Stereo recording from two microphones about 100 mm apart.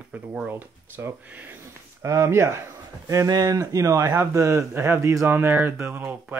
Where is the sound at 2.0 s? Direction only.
30° right (ahead or behind).